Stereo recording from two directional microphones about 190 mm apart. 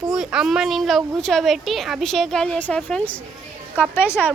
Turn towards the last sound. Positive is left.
turn(degrees=10)  # may be behind; listen again after turning